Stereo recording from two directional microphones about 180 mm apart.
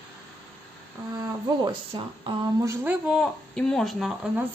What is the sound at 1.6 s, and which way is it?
A woman's voice, 25° right (ahead or behind).